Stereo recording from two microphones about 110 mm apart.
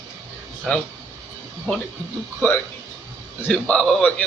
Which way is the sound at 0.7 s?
5° left (ahead or behind).